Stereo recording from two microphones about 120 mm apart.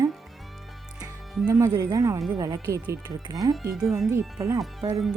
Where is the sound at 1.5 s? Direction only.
30° right (ahead or behind).